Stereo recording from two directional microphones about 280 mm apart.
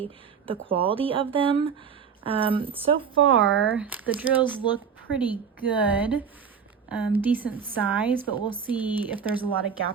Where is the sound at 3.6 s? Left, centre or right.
Centre.